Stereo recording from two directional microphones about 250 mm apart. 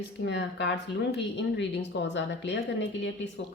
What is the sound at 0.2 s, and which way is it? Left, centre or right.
Speech, left.